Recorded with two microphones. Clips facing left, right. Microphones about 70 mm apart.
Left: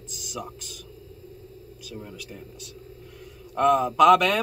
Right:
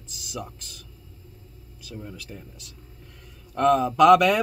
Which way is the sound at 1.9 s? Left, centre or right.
Centre.